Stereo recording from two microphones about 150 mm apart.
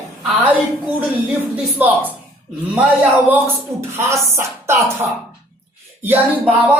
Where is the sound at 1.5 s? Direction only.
10° right (ahead or behind).